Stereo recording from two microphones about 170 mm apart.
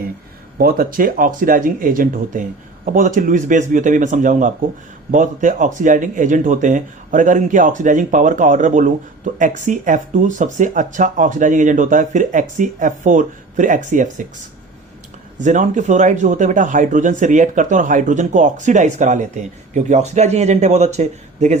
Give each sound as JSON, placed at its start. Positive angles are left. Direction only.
{"t": 0.6, "sound": "speech", "side_deg": -55}
{"t": 15.4, "sound": "speech", "side_deg": -45}